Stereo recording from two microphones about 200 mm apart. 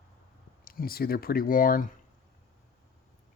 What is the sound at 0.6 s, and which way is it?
Speech, 45° left (ahead or behind).